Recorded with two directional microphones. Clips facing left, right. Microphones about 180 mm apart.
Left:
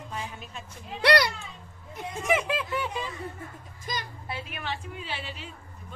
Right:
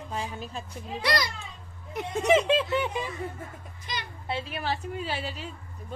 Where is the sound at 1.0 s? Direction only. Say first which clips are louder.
Left 6 dB; 70° left (ahead or behind).